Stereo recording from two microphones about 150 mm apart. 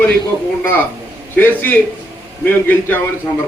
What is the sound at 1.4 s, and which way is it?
A man's voice, 10° left (ahead or behind).